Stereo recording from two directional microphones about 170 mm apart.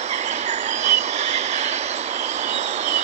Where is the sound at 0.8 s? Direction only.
40° right (ahead or behind).